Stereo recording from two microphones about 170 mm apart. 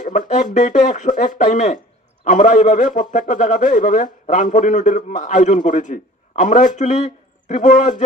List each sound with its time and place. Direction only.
0.0 s a man's voice: 45° left (ahead or behind)